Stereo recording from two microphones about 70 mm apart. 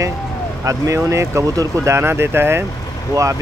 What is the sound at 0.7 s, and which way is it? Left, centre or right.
Speech, right.